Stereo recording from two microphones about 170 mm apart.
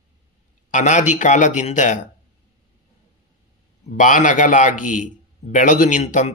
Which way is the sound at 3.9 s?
50° left (ahead or behind).